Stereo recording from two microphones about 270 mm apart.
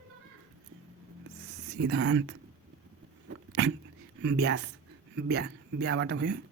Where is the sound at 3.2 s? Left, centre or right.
Right.